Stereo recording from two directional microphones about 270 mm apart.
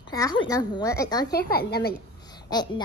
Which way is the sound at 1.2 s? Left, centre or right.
Left.